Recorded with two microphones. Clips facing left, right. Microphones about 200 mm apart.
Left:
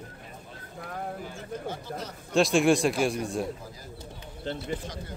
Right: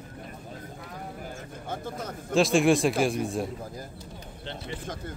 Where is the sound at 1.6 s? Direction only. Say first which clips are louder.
Right 5 dB; 50° right (ahead or behind).